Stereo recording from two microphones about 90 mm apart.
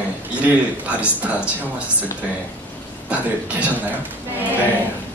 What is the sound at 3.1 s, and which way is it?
Speech, 15° right (ahead or behind).